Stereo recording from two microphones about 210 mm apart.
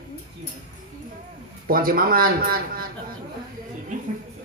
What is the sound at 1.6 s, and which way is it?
Speech, 45° right (ahead or behind).